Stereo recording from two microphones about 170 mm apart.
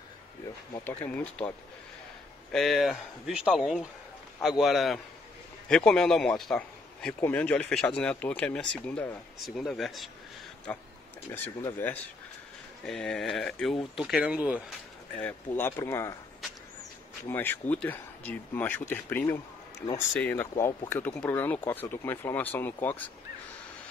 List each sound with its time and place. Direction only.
0.8 s speech: 10° left (ahead or behind)
2.5 s a man's voice: centre (ahead or behind)
15.1 s speech: 10° left (ahead or behind)
17.3 s speech: 10° left (ahead or behind)